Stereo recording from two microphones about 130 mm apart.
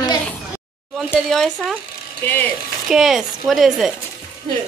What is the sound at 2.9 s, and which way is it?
A woman's voice, centre (ahead or behind).